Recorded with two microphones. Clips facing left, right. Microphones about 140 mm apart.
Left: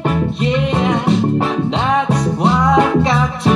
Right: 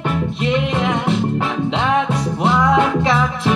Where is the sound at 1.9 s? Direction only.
35° left (ahead or behind).